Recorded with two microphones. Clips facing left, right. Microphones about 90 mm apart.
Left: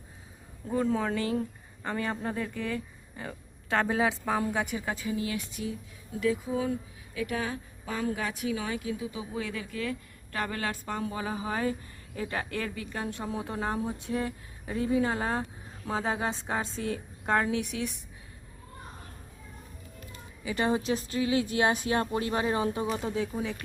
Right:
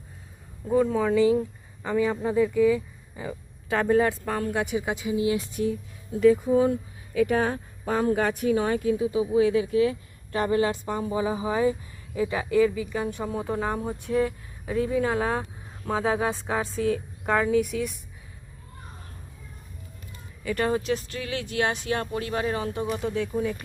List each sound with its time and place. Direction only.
0.7 s speech: 5° right (ahead or behind)
4.5 s speech: 10° right (ahead or behind)
5.6 s speech: 40° right (ahead or behind)
6.1 s speech: 55° right (ahead or behind)
7.1 s speech: 60° right (ahead or behind)
9.5 s speech: 25° right (ahead or behind); by 16.3 s centre (ahead or behind)
16.6 s a woman's voice: 70° right (ahead or behind)
16.9 s speech: 5° left (ahead or behind)
20.4 s speech: 15° left (ahead or behind)
23.2 s speech: centre (ahead or behind)